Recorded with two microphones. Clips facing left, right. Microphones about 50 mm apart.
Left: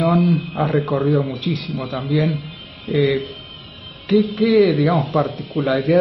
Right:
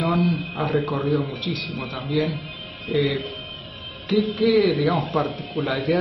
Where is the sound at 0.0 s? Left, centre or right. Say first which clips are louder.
Left 5 dB; centre.